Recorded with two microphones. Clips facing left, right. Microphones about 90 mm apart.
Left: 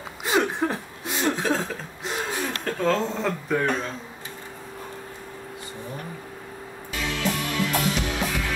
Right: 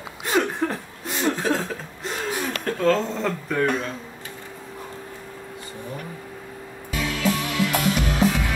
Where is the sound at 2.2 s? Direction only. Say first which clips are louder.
Right 4 dB; 5° right (ahead or behind).